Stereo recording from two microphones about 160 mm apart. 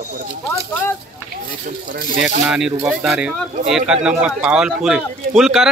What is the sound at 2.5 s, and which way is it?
Speech, 5° right (ahead or behind).